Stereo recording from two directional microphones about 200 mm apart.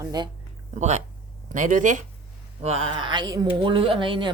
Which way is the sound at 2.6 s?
30° right (ahead or behind).